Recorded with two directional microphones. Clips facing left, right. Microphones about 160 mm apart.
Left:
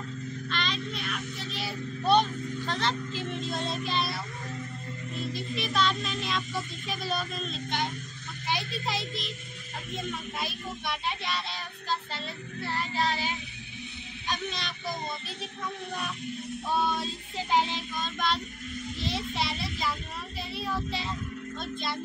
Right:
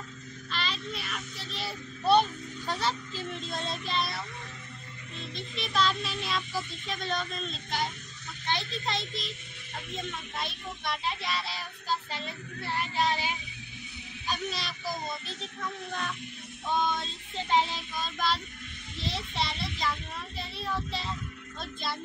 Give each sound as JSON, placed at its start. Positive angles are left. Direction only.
{"t": 0.5, "sound": "child singing", "side_deg": -5}
{"t": 8.5, "sound": "a child's voice", "side_deg": 5}
{"t": 10.3, "sound": "child singing", "side_deg": 0}
{"t": 12.9, "sound": "child singing", "side_deg": -15}
{"t": 14.2, "sound": "speech", "side_deg": -5}
{"t": 16.6, "sound": "child singing", "side_deg": 5}